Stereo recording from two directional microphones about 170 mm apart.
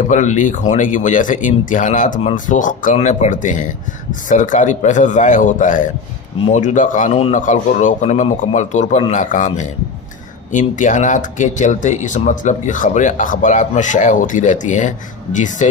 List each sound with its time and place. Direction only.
0.1 s speech: 45° left (ahead or behind)
6.3 s speech: 35° left (ahead or behind)
6.6 s speech: 50° left (ahead or behind)